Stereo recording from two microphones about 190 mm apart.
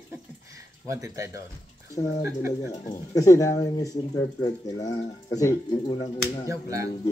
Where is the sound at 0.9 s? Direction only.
15° right (ahead or behind).